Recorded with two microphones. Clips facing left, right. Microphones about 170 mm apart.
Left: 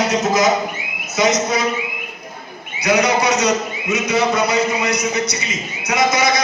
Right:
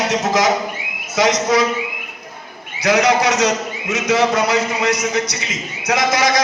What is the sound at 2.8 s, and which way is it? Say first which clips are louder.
A man's voice: right 1 dB; 90° right.